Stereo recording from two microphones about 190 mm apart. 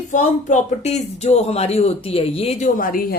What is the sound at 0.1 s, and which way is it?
Speech, 40° left (ahead or behind).